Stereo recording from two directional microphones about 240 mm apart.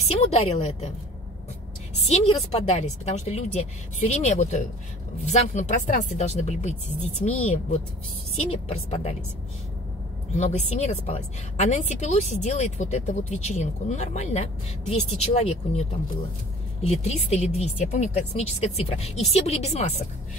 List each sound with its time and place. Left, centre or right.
0.2 s a woman's voice: left
2.0 s a woman's voice: left
10.3 s a woman's voice: left
16.8 s a woman's voice: left